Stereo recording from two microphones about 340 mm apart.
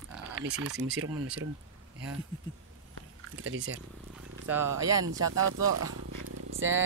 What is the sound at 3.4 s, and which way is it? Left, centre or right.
Speech, right.